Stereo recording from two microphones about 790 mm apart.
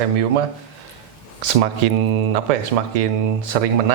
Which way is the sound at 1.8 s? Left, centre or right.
Right.